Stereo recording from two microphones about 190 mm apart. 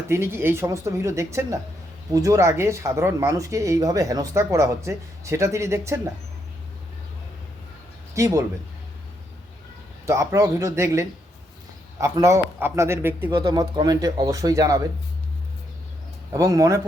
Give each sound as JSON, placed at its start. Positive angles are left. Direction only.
{"t": 0.1, "sound": "speech", "side_deg": -10}
{"t": 8.1, "sound": "speech", "side_deg": -15}
{"t": 10.1, "sound": "speech", "side_deg": -15}
{"t": 16.3, "sound": "speech", "side_deg": -15}